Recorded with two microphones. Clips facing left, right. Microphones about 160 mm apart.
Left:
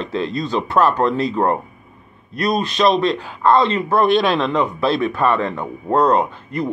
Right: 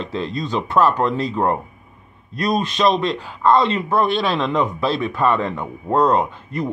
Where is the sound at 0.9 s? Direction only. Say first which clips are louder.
Left 2 dB; 5° right (ahead or behind).